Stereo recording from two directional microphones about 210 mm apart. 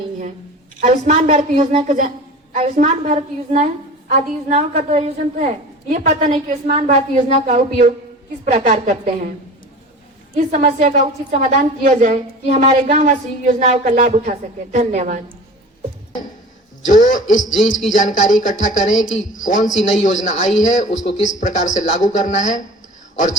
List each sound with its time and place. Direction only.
0.8 s a woman's voice: 35° right (ahead or behind)
10.3 s a woman's voice: 35° right (ahead or behind)
16.8 s a man's voice: 35° left (ahead or behind)